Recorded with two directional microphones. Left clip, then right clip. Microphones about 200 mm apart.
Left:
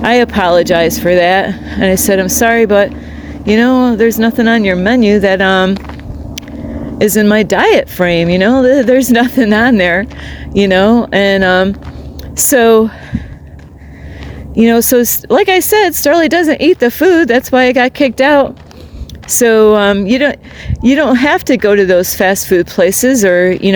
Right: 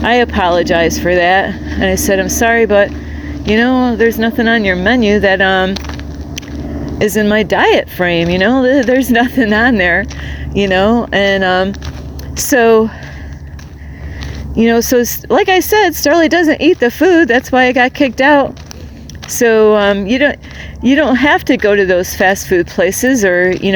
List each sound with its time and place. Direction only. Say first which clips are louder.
0.0 s speech: left 1 dB; 40° left (ahead or behind)
7.0 s speech: left 2 dB; 45° left (ahead or behind)
14.5 s speech: left 2 dB; 35° left (ahead or behind)